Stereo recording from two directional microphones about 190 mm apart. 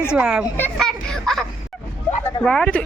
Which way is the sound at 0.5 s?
5° left (ahead or behind).